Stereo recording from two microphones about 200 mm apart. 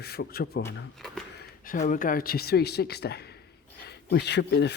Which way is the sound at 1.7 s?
40° left (ahead or behind).